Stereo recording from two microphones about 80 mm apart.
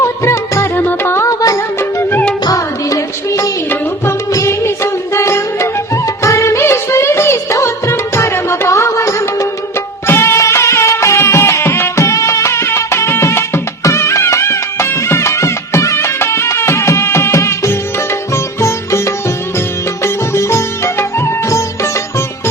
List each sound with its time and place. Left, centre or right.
0.0 s music: left
1.3 s music: left
2.4 s music: left
18.6 s sitar: left
19.5 s music: left